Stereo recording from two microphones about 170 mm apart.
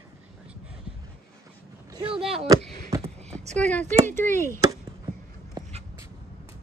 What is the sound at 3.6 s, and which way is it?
Speech, 10° left (ahead or behind).